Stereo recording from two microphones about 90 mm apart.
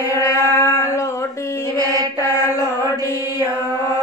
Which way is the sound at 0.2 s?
35° left (ahead or behind).